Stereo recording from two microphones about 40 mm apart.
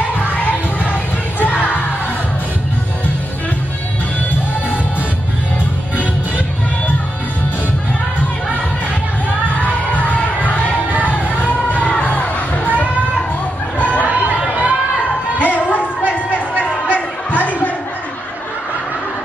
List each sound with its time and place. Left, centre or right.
0.3 s music: left
1.4 s crowd: left
9.6 s music: left
13.7 s chatter: left
14.1 s a sound: right
15.3 s a sound: left